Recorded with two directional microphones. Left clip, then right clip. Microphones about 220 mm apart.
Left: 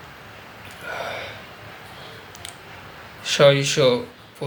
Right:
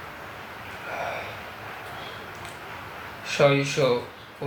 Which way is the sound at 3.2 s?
50° left (ahead or behind).